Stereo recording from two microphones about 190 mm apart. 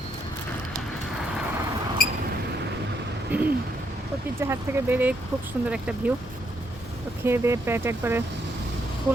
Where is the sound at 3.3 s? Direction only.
10° right (ahead or behind).